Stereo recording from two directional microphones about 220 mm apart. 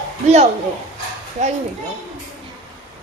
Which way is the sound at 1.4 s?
35° right (ahead or behind).